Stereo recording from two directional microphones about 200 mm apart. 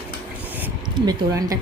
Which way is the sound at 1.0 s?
15° right (ahead or behind).